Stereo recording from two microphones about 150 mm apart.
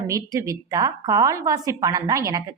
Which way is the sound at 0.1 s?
20° right (ahead or behind).